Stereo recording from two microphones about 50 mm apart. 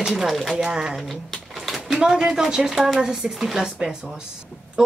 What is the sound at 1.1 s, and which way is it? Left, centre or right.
A woman's voice, centre.